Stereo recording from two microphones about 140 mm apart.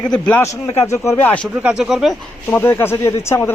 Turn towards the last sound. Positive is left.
turn(degrees=20)  # may be behind; listen again after turning